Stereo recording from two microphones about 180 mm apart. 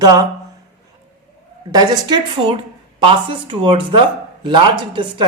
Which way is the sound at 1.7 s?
20° right (ahead or behind).